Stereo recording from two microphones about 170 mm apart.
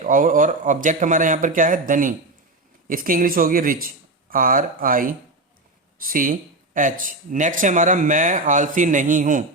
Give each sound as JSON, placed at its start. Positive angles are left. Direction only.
{"t": 0.0, "sound": "speech", "side_deg": -50}